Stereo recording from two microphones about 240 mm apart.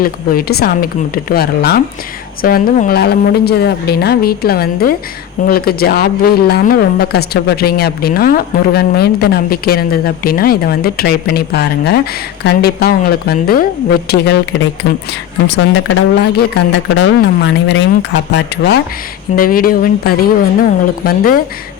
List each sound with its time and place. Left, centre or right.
0.0 s speech: left